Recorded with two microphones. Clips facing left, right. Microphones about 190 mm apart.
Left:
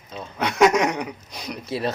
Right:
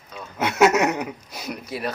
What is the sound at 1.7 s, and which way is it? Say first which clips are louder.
Speech: left 4 dB; 25° left (ahead or behind).